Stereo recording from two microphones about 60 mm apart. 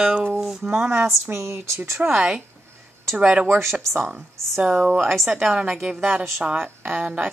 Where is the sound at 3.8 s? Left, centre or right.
Right.